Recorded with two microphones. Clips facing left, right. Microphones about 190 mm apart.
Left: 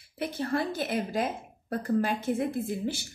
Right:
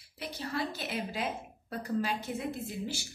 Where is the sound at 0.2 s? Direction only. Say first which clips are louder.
Left 6 dB; 55° left (ahead or behind).